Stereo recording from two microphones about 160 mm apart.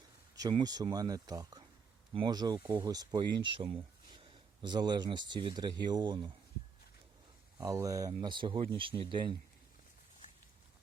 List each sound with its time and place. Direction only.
0.3 s speech: 25° right (ahead or behind)
7.6 s speech: 20° right (ahead or behind)